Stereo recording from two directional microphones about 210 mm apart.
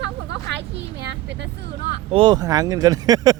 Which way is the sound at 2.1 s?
25° right (ahead or behind).